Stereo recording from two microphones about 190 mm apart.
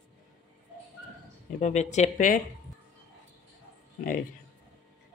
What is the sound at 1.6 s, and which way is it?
Speech, 40° left (ahead or behind).